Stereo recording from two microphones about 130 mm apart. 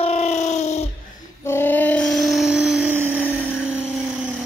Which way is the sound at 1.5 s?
15° left (ahead or behind).